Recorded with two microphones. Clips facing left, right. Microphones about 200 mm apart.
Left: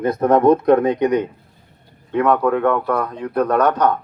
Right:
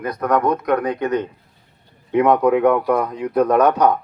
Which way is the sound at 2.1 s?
15° right (ahead or behind).